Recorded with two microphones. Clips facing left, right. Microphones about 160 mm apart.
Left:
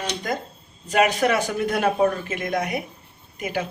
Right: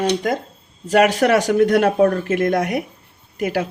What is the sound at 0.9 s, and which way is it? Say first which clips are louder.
Speech: right 5 dB; 80° right.